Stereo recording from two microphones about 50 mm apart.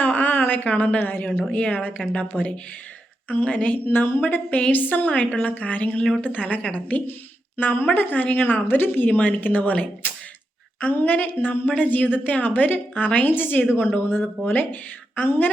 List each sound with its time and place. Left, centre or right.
0.0 s a sound: left
0.8 s speech: left
3.5 s speech: left
3.8 s a woman's voice: left
4.2 s a woman's voice: left
7.5 s a woman's voice: left